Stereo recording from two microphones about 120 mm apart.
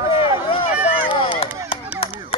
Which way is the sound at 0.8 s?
50° left (ahead or behind).